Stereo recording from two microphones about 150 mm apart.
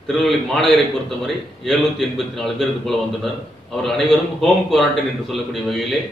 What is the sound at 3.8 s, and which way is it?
A man's voice, centre (ahead or behind).